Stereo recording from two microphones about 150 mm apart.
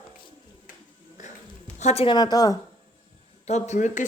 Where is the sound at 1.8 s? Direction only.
45° left (ahead or behind).